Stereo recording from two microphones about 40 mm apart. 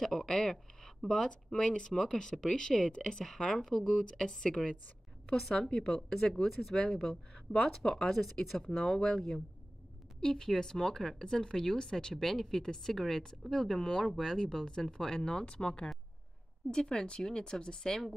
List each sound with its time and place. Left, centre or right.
0.0 s speech: centre
3.5 s speech: centre
3.9 s speech: centre
7.3 s speech: centre
8.1 s speech: centre